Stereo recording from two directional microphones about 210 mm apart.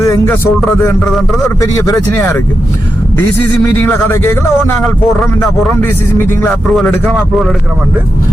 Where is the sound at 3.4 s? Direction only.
10° left (ahead or behind).